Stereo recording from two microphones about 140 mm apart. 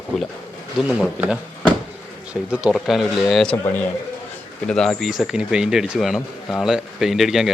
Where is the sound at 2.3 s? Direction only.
10° right (ahead or behind).